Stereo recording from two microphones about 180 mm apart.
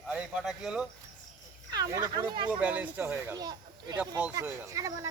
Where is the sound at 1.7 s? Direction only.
20° right (ahead or behind).